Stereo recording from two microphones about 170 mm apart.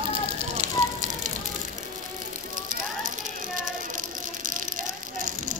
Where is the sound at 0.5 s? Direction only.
45° right (ahead or behind).